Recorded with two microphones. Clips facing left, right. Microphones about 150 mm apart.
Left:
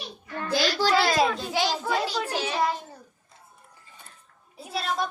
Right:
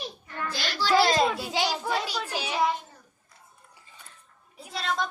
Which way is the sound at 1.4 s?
15° right (ahead or behind).